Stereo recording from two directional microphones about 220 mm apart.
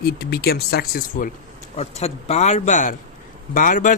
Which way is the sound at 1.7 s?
30° left (ahead or behind).